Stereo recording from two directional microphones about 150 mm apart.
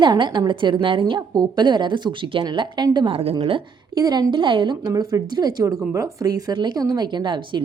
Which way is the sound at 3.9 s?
25° right (ahead or behind).